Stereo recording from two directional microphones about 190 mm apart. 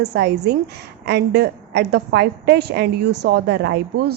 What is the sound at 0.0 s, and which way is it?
A woman's voice, 65° right (ahead or behind).